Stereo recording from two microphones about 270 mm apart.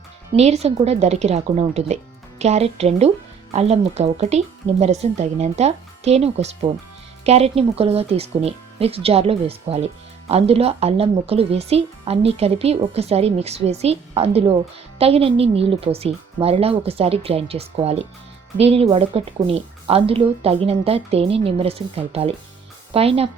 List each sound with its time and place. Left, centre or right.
0.3 s speech: right